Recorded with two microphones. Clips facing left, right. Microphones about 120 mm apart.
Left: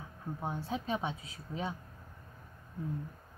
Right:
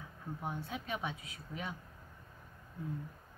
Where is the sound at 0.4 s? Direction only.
30° left (ahead or behind).